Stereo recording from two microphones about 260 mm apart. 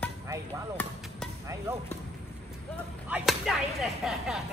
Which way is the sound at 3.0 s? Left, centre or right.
Centre.